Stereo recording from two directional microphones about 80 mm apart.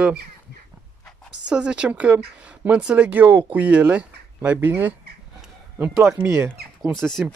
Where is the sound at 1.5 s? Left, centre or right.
Centre.